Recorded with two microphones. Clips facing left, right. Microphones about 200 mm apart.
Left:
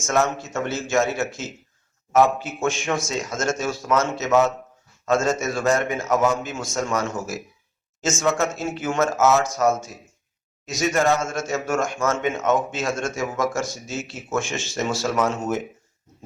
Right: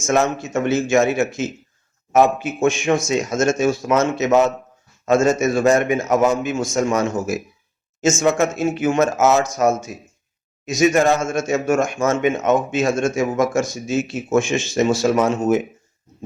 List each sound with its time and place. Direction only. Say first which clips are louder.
0.3 s speech: right 7 dB; 15° right (ahead or behind)